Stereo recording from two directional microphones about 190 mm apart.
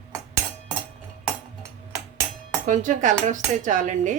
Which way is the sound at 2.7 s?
40° right (ahead or behind).